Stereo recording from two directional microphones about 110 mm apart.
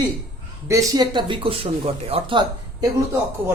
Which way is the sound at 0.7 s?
30° right (ahead or behind).